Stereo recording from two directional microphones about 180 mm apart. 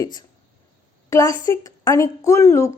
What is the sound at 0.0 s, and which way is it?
A woman's voice, 25° left (ahead or behind).